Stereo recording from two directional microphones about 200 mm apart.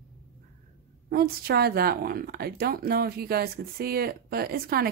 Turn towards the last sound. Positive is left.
turn(degrees=-50)  # may be behind; listen again after turning